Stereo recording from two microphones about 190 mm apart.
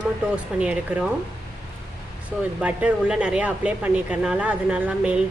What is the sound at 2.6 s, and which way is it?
Speech, 5° right (ahead or behind).